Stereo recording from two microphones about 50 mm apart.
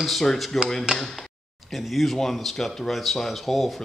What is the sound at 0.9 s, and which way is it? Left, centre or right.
Speech, centre.